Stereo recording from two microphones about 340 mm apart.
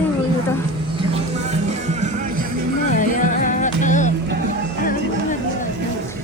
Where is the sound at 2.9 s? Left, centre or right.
Left.